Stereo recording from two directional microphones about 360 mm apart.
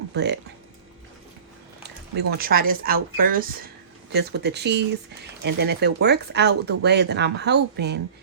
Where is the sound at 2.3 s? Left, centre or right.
Right.